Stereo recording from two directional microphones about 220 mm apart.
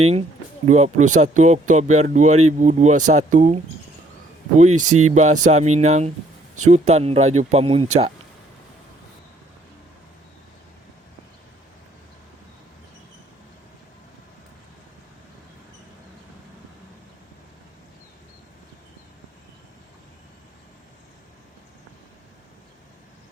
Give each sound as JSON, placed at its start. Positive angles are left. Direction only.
{"t": 0.0, "sound": "speech", "side_deg": -30}
{"t": 4.7, "sound": "speech", "side_deg": -85}
{"t": 5.1, "sound": "speech", "side_deg": -35}